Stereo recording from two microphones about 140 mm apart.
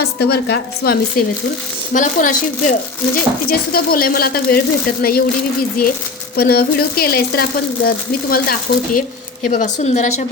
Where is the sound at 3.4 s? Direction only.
90° left.